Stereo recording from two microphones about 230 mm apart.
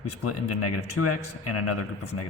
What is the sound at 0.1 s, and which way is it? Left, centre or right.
A man's voice, left.